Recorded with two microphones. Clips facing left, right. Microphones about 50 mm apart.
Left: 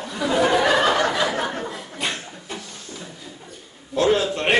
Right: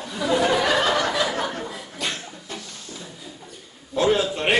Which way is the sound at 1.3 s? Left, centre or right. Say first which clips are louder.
Left 2 dB; centre.